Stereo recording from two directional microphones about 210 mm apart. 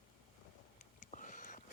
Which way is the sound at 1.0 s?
35° left (ahead or behind).